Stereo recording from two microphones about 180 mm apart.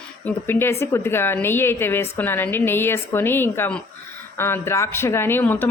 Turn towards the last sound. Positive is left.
turn(degrees=10)  # may be behind; listen again after turning